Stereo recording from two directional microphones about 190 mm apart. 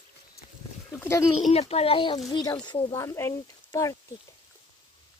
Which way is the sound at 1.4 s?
30° left (ahead or behind).